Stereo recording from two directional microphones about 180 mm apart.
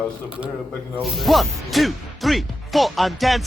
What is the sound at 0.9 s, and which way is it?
Speech, centre (ahead or behind).